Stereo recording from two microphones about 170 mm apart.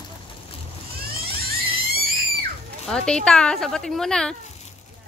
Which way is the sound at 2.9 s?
5° left (ahead or behind).